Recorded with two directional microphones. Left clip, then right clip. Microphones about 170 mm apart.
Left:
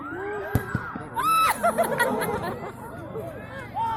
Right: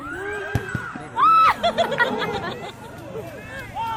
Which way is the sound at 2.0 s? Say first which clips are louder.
Right 3 dB; 35° left (ahead or behind).